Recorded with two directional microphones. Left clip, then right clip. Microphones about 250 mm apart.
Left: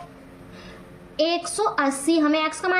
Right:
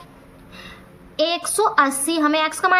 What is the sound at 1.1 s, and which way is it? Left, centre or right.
A woman's voice, right.